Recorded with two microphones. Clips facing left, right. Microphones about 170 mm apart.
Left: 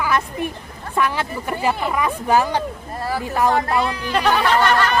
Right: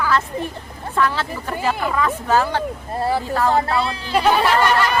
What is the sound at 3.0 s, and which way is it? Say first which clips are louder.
Speech: right 4 dB; 25° right (ahead or behind).